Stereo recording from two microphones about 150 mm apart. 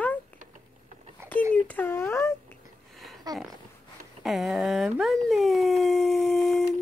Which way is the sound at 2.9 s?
Centre (ahead or behind).